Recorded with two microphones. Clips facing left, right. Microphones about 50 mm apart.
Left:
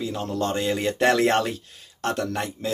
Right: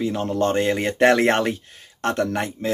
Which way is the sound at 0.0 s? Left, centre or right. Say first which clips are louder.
Right 5 dB; right.